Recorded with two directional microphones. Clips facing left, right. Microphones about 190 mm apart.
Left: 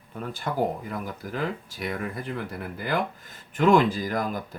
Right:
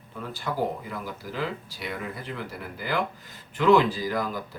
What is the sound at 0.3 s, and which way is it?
Speech, 50° left (ahead or behind).